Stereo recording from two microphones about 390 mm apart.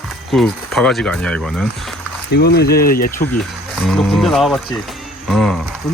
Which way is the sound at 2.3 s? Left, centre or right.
Left.